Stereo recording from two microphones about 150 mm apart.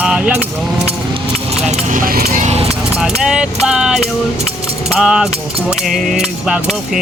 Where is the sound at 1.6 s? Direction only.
55° right (ahead or behind); by 2.4 s 75° right (ahead or behind).